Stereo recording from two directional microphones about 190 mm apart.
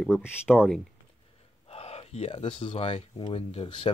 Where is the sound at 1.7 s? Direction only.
30° left (ahead or behind).